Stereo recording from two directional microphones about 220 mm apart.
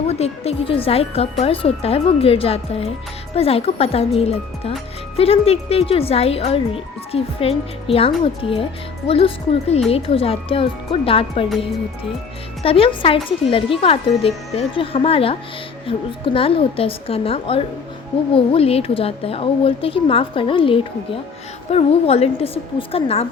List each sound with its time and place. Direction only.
0.1 s speech: 30° left (ahead or behind)
12.6 s speech: 25° left (ahead or behind)